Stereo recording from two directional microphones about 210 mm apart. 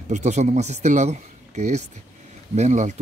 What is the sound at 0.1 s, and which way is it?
Speech, 35° right (ahead or behind).